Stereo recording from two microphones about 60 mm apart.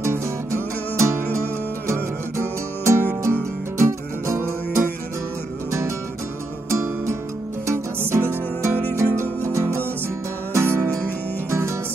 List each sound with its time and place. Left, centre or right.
0.0 s music: right